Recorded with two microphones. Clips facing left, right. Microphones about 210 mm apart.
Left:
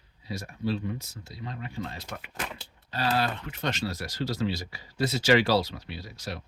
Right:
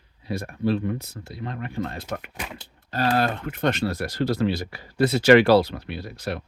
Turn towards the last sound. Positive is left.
turn(degrees=-60)  # may be behind; listen again after turning